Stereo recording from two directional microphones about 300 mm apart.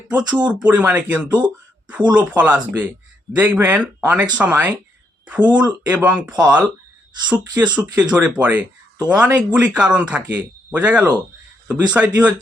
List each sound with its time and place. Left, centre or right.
0.1 s speech: centre